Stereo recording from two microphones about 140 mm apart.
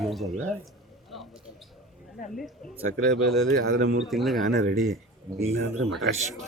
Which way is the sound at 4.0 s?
Centre (ahead or behind).